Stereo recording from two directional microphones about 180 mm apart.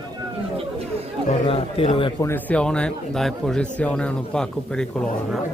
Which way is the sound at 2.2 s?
10° left (ahead or behind).